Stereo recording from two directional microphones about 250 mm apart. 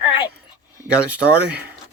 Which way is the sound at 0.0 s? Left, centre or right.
Centre.